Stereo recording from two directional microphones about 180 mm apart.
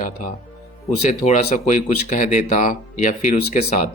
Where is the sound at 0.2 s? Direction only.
45° left (ahead or behind).